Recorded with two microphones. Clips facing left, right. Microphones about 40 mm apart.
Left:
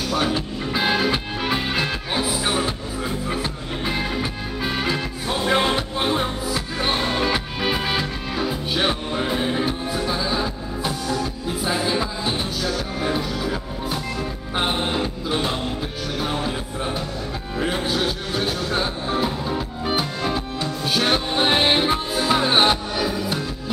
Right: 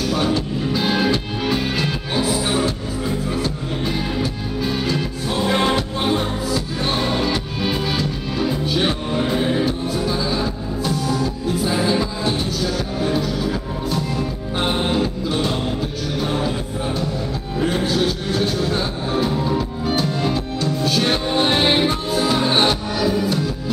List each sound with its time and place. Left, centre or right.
0.1 s music: centre
19.8 s music: centre